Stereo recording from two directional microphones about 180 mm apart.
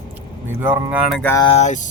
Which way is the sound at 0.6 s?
10° right (ahead or behind).